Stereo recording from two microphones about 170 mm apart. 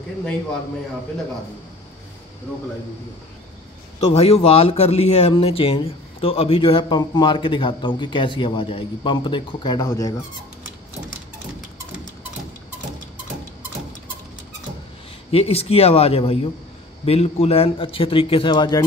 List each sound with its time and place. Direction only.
4.1 s a man's voice: 35° left (ahead or behind); by 10.1 s 20° left (ahead or behind)
15.3 s a man's voice: 35° left (ahead or behind)